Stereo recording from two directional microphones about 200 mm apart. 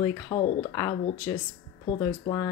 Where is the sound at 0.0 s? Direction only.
25° left (ahead or behind).